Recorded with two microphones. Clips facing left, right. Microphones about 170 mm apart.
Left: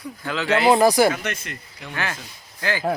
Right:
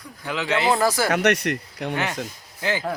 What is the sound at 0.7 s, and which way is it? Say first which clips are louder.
Speech: left 7 dB; 15° left (ahead or behind).